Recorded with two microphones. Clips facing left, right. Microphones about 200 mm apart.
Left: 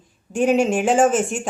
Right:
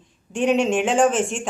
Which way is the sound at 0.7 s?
40° left (ahead or behind).